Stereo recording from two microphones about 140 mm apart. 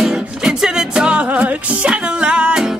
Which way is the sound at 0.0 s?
5° right (ahead or behind).